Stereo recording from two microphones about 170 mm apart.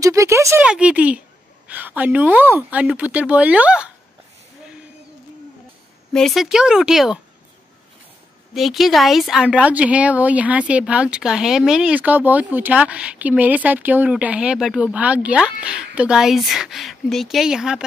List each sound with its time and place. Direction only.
0.0 s speech: 20° right (ahead or behind)
0.7 s speech: 5° right (ahead or behind)
6.1 s speech: centre (ahead or behind)
8.5 s speech: centre (ahead or behind)